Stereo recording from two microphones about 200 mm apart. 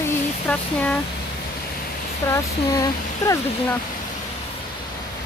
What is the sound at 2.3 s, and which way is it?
Speech, 15° left (ahead or behind).